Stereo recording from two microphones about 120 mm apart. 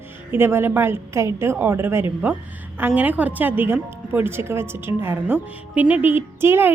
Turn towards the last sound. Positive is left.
turn(degrees=-20)  # may be behind; listen again after turning